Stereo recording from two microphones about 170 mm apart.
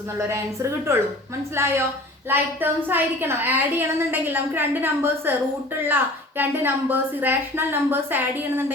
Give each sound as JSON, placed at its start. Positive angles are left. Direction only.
{"t": 0.3, "sound": "a woman's voice", "side_deg": -15}